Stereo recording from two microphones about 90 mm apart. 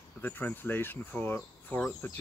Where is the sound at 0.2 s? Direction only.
20° left (ahead or behind).